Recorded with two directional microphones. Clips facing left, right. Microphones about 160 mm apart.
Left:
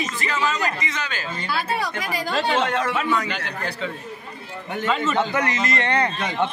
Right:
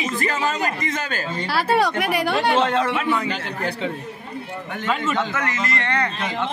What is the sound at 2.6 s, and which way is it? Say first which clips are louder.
Speech: right 2 dB; 30° right (ahead or behind).